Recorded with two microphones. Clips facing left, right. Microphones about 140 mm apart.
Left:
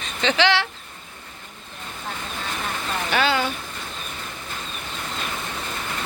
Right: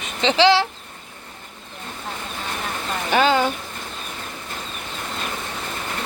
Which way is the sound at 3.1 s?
45° right (ahead or behind).